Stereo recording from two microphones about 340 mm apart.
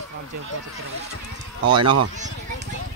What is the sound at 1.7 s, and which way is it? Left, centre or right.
Speech, centre.